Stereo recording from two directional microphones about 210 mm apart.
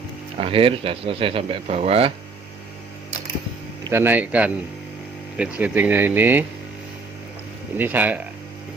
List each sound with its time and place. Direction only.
0.3 s speech: 25° right (ahead or behind)
3.8 s speech: 10° right (ahead or behind)
7.8 s speech: 10° right (ahead or behind)